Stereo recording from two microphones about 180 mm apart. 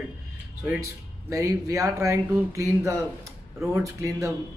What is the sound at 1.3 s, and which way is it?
Speech, 15° right (ahead or behind).